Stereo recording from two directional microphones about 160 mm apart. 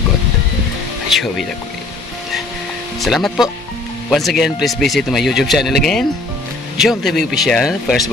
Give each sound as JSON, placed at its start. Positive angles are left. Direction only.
{"t": 1.1, "sound": "speech", "side_deg": 0}
{"t": 3.0, "sound": "speech", "side_deg": 0}